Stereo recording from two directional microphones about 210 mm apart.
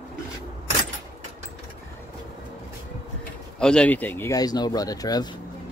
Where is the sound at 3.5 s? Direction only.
5° left (ahead or behind).